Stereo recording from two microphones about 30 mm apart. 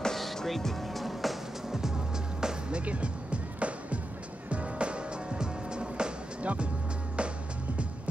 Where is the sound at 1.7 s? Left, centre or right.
Centre.